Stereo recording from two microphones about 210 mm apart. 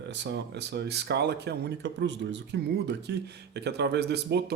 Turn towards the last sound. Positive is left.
turn(degrees=-50)  # may be behind; listen again after turning